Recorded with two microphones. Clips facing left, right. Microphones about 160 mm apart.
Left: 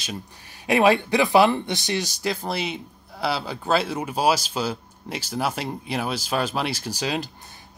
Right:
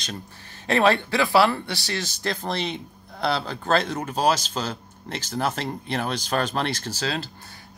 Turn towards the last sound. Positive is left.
turn(degrees=15)  # may be behind; listen again after turning